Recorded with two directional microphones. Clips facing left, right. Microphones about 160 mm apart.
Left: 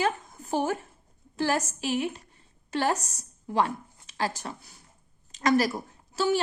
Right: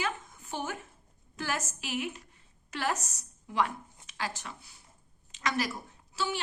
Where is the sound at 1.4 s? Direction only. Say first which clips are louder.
Left 8 dB; 35° left (ahead or behind).